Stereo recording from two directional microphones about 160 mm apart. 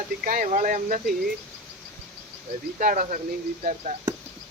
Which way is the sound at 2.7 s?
55° right (ahead or behind).